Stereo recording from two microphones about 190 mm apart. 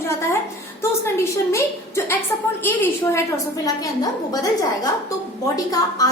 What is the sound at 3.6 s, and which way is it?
A woman's voice, 20° left (ahead or behind).